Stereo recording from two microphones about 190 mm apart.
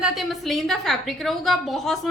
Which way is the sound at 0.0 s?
Centre (ahead or behind).